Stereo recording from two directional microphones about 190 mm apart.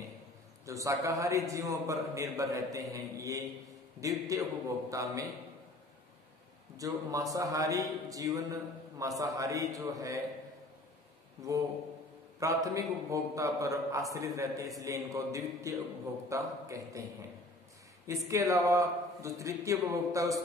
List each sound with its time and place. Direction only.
0.7 s a man's voice: 15° right (ahead or behind)
6.8 s a man's voice: 20° right (ahead or behind)
11.4 s a man's voice: 15° right (ahead or behind)
18.0 s a man's voice: 15° right (ahead or behind)